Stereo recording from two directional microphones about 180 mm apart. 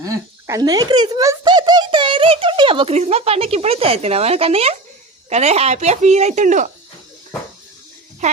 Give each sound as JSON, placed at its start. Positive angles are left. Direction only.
{"t": 0.0, "sound": "speech", "side_deg": -20}
{"t": 8.2, "sound": "speech", "side_deg": -40}